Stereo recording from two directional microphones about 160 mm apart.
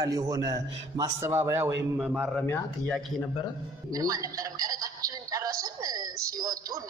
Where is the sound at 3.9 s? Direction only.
20° right (ahead or behind).